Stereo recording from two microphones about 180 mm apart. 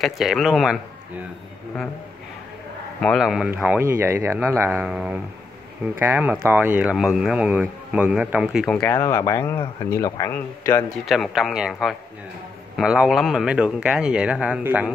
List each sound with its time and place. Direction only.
0.0 s speech: centre (ahead or behind)
3.0 s speech: centre (ahead or behind)
11.1 s speech: centre (ahead or behind)